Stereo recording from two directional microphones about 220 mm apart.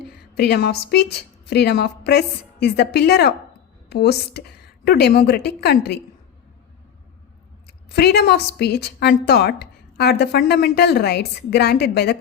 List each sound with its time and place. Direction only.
0.3 s a woman's voice: 50° left (ahead or behind)
7.9 s a woman's voice: 45° left (ahead or behind)